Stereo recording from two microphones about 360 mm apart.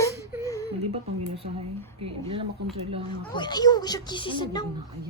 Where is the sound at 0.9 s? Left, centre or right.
Centre.